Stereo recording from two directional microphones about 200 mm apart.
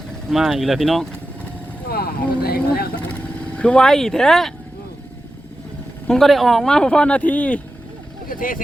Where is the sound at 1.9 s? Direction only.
50° left (ahead or behind).